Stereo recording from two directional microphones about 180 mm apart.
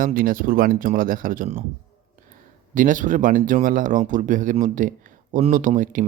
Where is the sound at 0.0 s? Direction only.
50° right (ahead or behind).